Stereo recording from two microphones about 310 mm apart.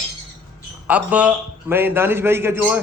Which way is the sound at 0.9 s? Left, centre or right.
Centre.